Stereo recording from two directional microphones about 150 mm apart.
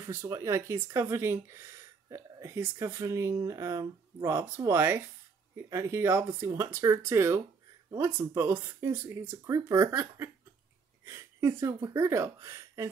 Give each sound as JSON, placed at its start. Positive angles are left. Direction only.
{"t": 0.0, "sound": "speech", "side_deg": -20}